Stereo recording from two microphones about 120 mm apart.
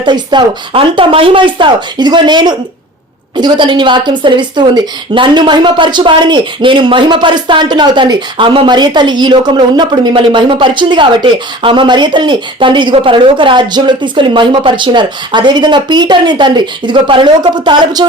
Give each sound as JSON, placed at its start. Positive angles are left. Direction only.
{"t": 0.0, "sound": "a woman's voice", "side_deg": -40}